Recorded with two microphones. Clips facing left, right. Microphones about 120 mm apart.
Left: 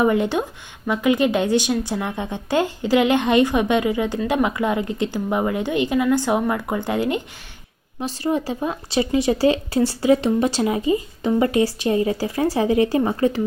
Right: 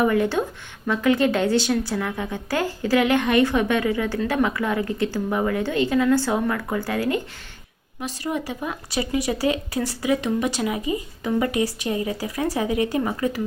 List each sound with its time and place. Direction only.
0.0 s speech: 20° left (ahead or behind)